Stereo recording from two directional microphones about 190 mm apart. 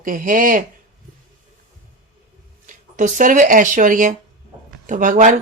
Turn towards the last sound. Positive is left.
turn(degrees=-40)  # may be behind; listen again after turning